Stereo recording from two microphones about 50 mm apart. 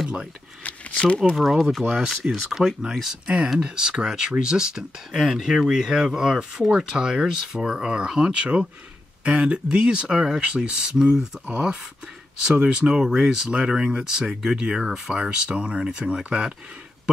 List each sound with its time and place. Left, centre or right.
0.7 s a sound: left
1.3 s speech: centre
12.5 s speech: right
12.9 s speech: centre
15.1 s speech: centre